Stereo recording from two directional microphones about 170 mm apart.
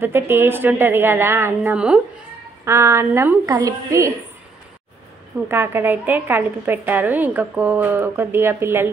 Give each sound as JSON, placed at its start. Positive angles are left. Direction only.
{"t": 0.0, "sound": "a woman's voice", "side_deg": -15}
{"t": 5.5, "sound": "a woman's voice", "side_deg": -15}